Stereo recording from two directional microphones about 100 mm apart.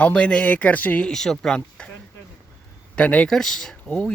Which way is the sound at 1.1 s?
5° left (ahead or behind).